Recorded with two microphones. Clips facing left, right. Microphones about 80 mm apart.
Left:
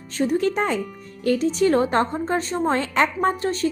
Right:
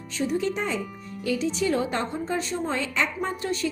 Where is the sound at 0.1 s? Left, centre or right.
Left.